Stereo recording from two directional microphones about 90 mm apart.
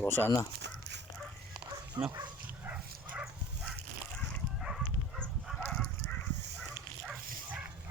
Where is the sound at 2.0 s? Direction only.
45° right (ahead or behind).